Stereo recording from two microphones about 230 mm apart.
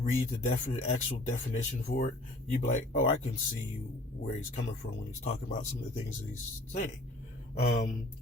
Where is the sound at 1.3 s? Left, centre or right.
Left.